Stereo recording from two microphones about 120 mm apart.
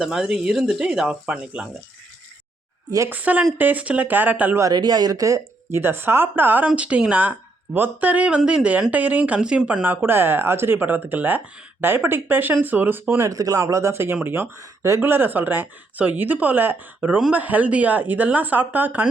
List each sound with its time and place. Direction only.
0.0 s speech: 5° right (ahead or behind)
3.1 s speech: 15° right (ahead or behind)
4.6 s speech: 35° right (ahead or behind); by 19.0 s 15° right (ahead or behind)